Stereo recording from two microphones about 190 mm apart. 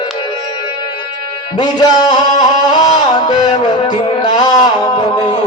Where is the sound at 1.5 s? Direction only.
20° left (ahead or behind).